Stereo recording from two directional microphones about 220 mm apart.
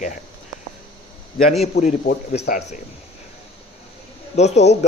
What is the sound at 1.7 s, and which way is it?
A man's voice, 45° left (ahead or behind).